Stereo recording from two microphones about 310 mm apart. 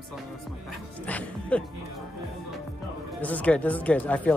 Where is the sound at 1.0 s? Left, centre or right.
Centre.